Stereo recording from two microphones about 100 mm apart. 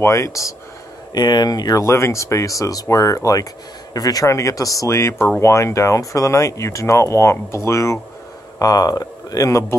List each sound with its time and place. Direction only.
0.0 s speech: 30° left (ahead or behind)
1.1 s speech: 45° left (ahead or behind)
8.5 s speech: 40° left (ahead or behind)